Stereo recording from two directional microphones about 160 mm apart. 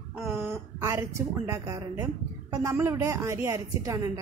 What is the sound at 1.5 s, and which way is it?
A woman's voice, 20° right (ahead or behind).